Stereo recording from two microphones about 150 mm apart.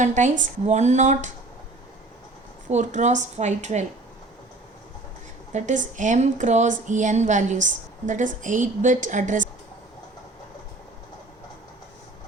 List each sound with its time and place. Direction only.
0.0 s speech: 55° right (ahead or behind)
2.6 s speech: 50° right (ahead or behind)
5.5 s a woman's voice: 50° right (ahead or behind)